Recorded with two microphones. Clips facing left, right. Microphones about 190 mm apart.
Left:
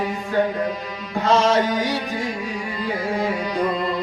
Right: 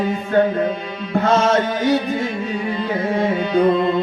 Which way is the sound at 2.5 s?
25° right (ahead or behind).